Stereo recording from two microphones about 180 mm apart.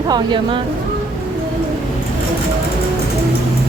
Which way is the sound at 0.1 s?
25° right (ahead or behind).